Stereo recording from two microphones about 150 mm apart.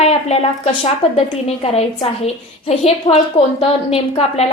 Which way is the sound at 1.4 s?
40° left (ahead or behind).